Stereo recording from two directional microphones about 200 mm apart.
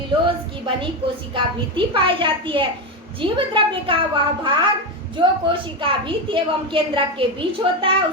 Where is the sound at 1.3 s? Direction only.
25° right (ahead or behind).